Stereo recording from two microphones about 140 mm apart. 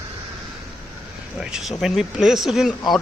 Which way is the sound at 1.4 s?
5° right (ahead or behind).